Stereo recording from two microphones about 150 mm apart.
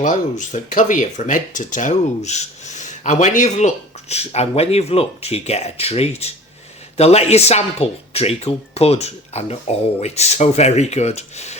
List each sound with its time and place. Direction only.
0.0 s speech: 55° left (ahead or behind)